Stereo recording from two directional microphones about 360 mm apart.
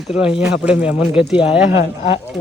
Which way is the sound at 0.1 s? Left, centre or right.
Centre.